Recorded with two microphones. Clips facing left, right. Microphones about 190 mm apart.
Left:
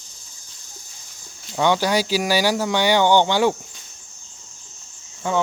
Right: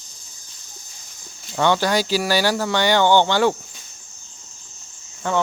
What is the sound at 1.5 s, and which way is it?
Speech, 10° left (ahead or behind).